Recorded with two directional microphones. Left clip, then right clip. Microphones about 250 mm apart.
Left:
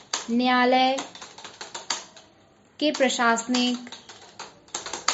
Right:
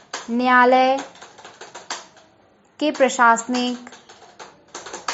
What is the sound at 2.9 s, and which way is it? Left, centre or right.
Speech, centre.